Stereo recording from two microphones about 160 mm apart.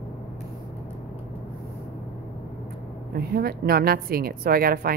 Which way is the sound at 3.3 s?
70° right (ahead or behind).